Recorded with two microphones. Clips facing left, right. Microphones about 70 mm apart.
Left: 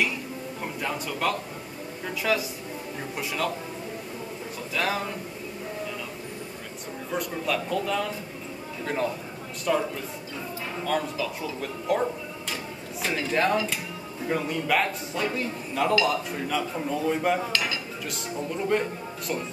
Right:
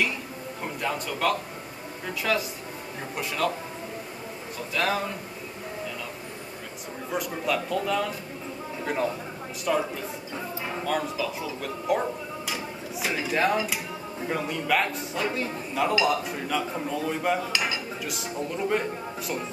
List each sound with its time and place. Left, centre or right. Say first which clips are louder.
0.8 s a man's voice: right 2 dB; centre
4.7 s speech: right 1 dB; centre
7.1 s speech: right 1 dB; centre
13.0 s speech: even; centre
15.9 s a man's voice: left 1 dB; centre
16.3 s speech: even; centre
17.5 s dishes: even; centre
18.7 s speech: left 1 dB; centre